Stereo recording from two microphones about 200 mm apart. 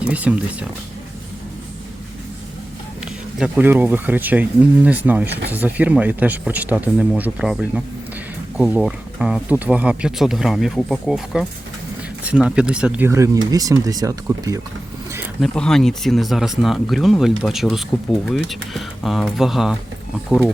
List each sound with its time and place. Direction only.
0.0 s speech: 5° right (ahead or behind)
3.3 s speech: 5° right (ahead or behind)
15.4 s speech: 5° left (ahead or behind)